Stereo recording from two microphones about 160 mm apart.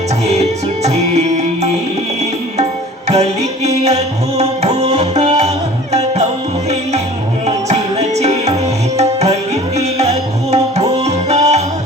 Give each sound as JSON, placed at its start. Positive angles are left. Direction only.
{"t": 0.9, "sound": "music", "side_deg": -45}
{"t": 3.1, "sound": "music", "side_deg": -40}
{"t": 7.4, "sound": "music", "side_deg": -40}
{"t": 9.0, "sound": "tabla", "side_deg": -45}
{"t": 11.0, "sound": "music", "side_deg": -45}